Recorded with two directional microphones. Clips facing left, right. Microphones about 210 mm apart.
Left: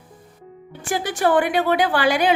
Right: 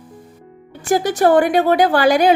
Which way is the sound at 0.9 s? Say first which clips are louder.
Right 6 dB; 40° right (ahead or behind).